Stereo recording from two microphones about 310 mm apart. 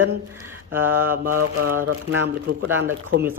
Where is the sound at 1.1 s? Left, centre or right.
Right.